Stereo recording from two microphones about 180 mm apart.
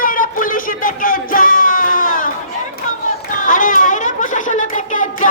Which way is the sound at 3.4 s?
50° left (ahead or behind).